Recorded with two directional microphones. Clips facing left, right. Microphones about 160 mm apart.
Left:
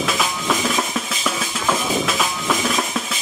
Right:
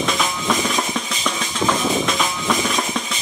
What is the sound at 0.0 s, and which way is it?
Drum, 5° left (ahead or behind).